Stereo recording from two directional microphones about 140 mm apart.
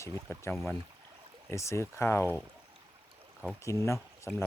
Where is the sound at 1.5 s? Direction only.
20° left (ahead or behind).